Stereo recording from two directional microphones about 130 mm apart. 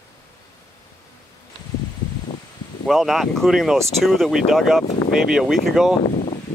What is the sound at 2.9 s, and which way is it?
Speech, centre (ahead or behind).